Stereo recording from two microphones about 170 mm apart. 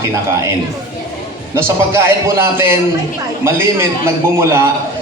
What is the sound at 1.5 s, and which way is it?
A man's voice, 15° right (ahead or behind).